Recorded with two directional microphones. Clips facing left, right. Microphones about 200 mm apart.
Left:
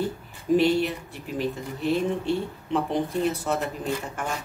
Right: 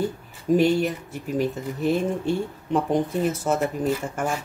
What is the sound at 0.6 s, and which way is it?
Speech, 45° right (ahead or behind).